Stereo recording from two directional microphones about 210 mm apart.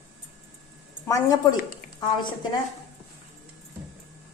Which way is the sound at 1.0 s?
15° left (ahead or behind).